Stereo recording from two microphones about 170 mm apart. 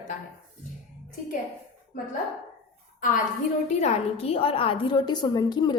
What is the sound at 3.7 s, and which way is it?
A woman's voice, 40° left (ahead or behind).